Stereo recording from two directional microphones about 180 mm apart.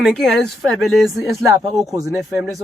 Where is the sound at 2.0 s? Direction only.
20° right (ahead or behind).